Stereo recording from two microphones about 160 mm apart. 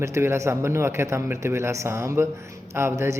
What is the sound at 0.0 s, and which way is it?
Speech, 15° right (ahead or behind).